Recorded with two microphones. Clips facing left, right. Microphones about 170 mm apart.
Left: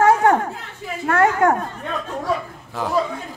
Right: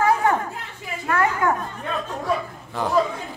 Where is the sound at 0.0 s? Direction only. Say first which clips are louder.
Left 5 dB; 75° left (ahead or behind).